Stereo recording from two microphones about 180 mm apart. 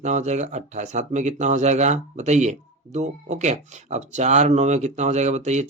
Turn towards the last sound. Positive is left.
turn(degrees=-40)  # may be behind; listen again after turning